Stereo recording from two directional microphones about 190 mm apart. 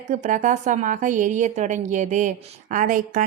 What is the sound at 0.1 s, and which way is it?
A woman's voice, 40° right (ahead or behind).